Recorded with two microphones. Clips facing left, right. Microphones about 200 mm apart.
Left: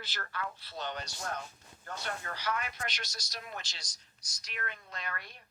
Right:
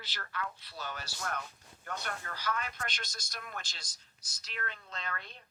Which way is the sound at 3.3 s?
50° right (ahead or behind).